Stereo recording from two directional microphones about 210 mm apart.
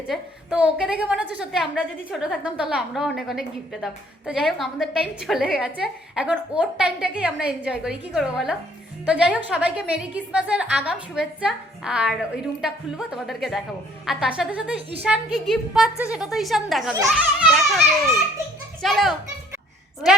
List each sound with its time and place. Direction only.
0.1 s a woman's voice: 5° right (ahead or behind)
14.8 s a woman's voice: 30° right (ahead or behind)
15.0 s a woman's voice: 5° right (ahead or behind)